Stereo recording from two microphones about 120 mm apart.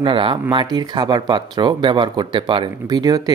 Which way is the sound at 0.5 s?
35° right (ahead or behind).